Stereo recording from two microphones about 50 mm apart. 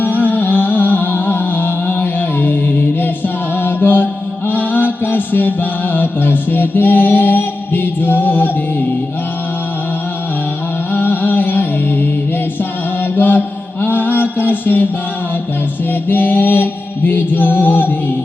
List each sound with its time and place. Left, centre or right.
0.0 s music: left
3.6 s mantra: left
10.9 s music: left
13.1 s mantra: left
16.0 s music: left